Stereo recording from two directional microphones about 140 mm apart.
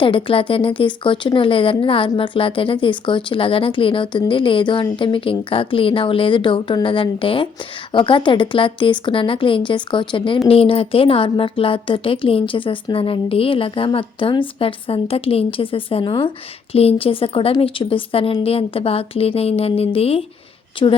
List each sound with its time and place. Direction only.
0.0 s a woman's voice: 40° left (ahead or behind)